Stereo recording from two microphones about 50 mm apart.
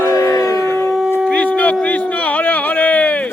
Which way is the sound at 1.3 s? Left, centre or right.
Left.